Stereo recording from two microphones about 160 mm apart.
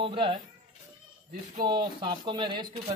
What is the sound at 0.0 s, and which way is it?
Speech, 30° right (ahead or behind).